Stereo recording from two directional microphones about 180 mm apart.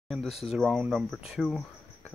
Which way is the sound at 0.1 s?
Centre (ahead or behind).